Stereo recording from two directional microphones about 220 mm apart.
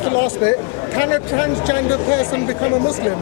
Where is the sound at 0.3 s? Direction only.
25° left (ahead or behind).